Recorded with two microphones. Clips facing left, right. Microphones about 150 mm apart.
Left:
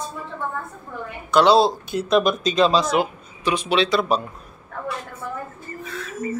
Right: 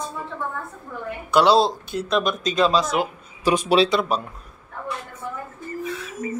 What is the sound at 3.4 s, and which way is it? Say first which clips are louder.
Speech: right 3 dB; 40° right (ahead or behind).